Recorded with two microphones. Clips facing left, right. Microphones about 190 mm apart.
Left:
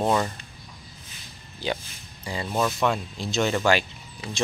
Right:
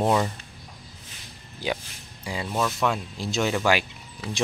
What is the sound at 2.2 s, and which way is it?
Speech, 5° right (ahead or behind).